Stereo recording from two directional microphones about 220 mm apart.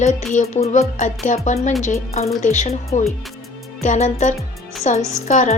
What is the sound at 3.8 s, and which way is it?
Speech, 35° left (ahead or behind).